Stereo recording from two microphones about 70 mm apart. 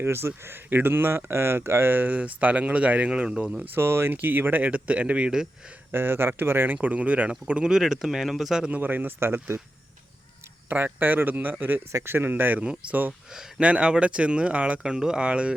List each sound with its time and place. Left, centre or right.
0.0 s speech: right; by 3.6 s centre
3.8 s speech: right; by 5.5 s centre
5.9 s speech: right
6.8 s speech: centre
8.7 s speech: right
10.7 s speech: right
11.9 s speech: right
13.3 s speech: centre